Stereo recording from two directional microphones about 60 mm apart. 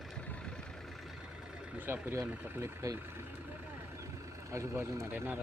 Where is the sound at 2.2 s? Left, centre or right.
Right.